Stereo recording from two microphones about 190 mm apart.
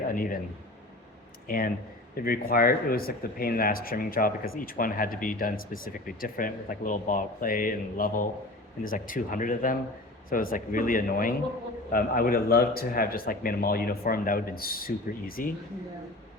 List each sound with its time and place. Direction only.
0.1 s speech: 45° left (ahead or behind)
1.5 s speech: 50° left (ahead or behind)